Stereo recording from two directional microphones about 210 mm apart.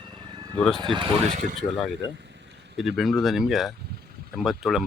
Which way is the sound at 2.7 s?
Centre (ahead or behind).